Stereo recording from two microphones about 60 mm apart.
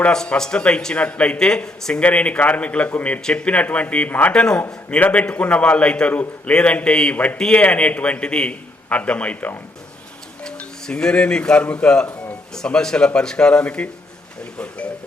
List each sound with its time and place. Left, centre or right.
0.1 s a man's voice: centre
7.3 s a man's voice: centre